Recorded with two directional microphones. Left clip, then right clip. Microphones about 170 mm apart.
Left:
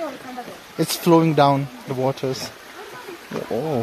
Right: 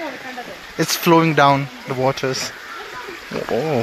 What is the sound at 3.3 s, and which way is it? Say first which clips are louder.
Speech: right 4 dB; 5° right (ahead or behind).